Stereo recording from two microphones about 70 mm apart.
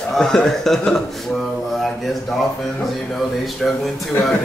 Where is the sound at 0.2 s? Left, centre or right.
Centre.